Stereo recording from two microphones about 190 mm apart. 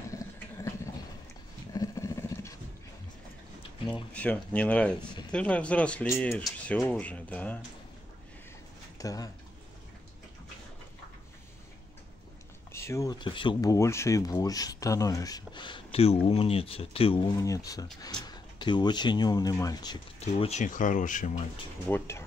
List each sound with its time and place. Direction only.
0.1 s water: 15° left (ahead or behind)
1.7 s dog: 20° left (ahead or behind)
4.1 s speech: 5° left (ahead or behind)
8.9 s speech: 20° left (ahead or behind)
12.7 s speech: 15° left (ahead or behind)
17.5 s speech: 20° left (ahead or behind)
20.2 s speech: 35° left (ahead or behind)
21.8 s speech: 10° left (ahead or behind)